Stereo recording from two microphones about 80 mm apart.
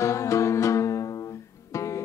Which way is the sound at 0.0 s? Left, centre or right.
Left.